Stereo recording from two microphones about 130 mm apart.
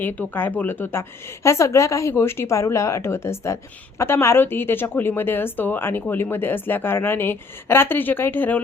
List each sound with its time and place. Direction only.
0.0 s a woman's voice: 15° left (ahead or behind)